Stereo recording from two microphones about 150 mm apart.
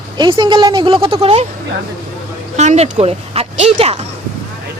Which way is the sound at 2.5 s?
50° right (ahead or behind).